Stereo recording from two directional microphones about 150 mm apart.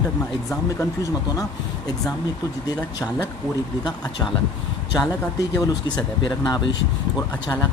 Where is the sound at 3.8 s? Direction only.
25° left (ahead or behind).